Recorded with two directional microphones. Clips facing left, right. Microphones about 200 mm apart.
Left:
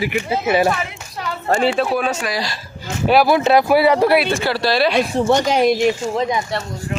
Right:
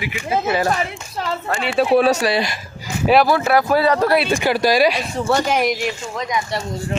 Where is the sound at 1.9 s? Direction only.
35° right (ahead or behind).